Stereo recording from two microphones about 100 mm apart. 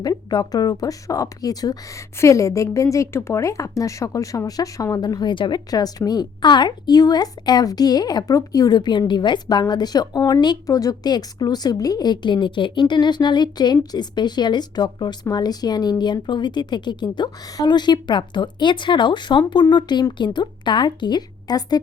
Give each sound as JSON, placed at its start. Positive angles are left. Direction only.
{"t": 0.0, "sound": "a woman's voice", "side_deg": 40}